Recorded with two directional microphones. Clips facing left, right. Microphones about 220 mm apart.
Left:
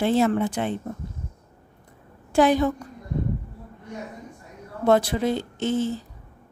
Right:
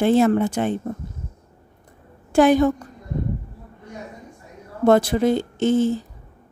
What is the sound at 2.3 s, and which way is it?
Speech, 50° right (ahead or behind).